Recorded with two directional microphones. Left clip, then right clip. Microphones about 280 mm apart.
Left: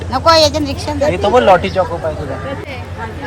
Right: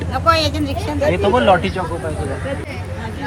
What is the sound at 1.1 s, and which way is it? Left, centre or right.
Speech, left.